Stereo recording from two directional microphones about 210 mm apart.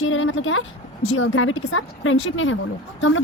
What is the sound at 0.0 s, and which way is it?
Speech, 70° left (ahead or behind).